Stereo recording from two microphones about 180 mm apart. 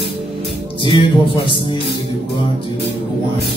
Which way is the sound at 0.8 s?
30° left (ahead or behind).